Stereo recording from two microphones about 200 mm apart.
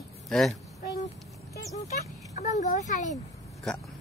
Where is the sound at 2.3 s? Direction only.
35° left (ahead or behind).